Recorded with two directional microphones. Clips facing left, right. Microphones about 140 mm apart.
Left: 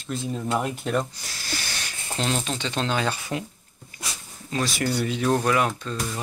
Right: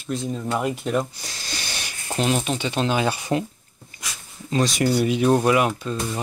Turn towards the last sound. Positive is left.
turn(degrees=-15)  # may be behind; listen again after turning